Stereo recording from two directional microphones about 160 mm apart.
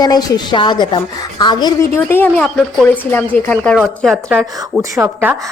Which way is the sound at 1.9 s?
15° left (ahead or behind).